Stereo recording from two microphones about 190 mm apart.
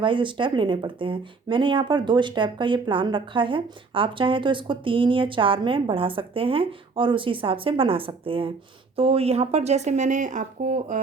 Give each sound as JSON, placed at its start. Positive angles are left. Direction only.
{"t": 0.0, "sound": "speech", "side_deg": -25}